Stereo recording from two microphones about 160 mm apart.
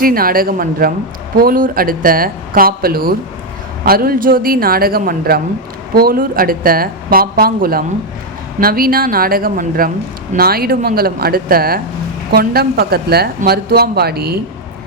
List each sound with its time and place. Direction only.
0.0 s speech: 65° right (ahead or behind); by 14.3 s 80° right